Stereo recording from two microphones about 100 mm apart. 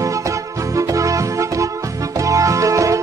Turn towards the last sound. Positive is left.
turn(degrees=-30)  # may be behind; listen again after turning